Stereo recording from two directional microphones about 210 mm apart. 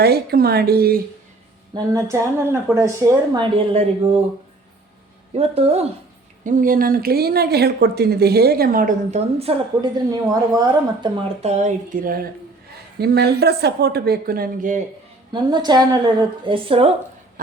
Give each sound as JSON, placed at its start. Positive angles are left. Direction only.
{"t": 0.0, "sound": "speech", "side_deg": -50}
{"t": 1.7, "sound": "speech", "side_deg": -15}
{"t": 5.3, "sound": "speech", "side_deg": -30}
{"t": 6.4, "sound": "speech", "side_deg": -40}
{"t": 15.3, "sound": "speech", "side_deg": -20}